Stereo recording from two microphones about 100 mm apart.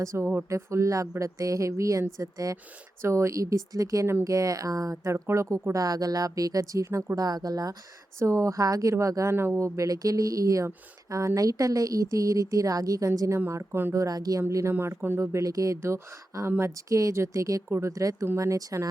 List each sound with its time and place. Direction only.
0.0 s speech: 30° right (ahead or behind)
14.0 s speech: 40° right (ahead or behind)
14.5 s speech: 25° right (ahead or behind)